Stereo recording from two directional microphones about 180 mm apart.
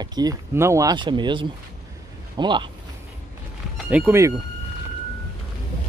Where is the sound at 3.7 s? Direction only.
10° right (ahead or behind).